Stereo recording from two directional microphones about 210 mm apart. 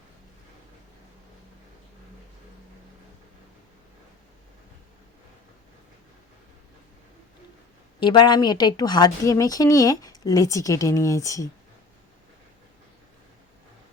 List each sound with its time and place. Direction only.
7.9 s speech: 20° left (ahead or behind)